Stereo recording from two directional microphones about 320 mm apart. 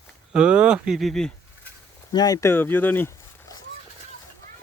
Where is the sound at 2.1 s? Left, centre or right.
Centre.